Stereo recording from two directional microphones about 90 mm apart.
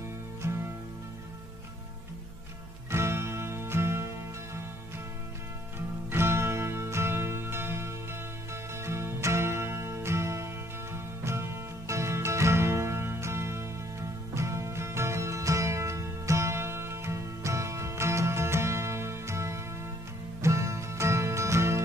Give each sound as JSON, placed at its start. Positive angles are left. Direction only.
{"t": 0.4, "sound": "music", "side_deg": -30}
{"t": 2.9, "sound": "music", "side_deg": -30}
{"t": 5.8, "sound": "music", "side_deg": -25}